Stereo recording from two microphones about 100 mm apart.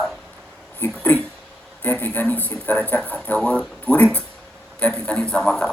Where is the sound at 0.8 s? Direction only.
15° left (ahead or behind).